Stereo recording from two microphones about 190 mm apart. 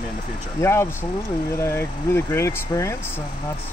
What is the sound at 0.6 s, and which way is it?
Speech, 15° left (ahead or behind).